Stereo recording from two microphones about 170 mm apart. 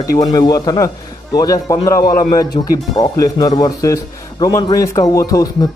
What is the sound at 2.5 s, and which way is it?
Speech, 30° left (ahead or behind).